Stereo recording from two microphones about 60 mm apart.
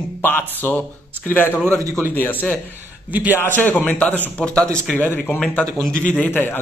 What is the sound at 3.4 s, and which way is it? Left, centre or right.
Speech, left.